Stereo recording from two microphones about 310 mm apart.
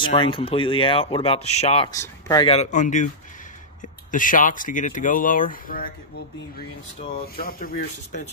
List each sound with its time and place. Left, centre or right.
0.0 s speech: centre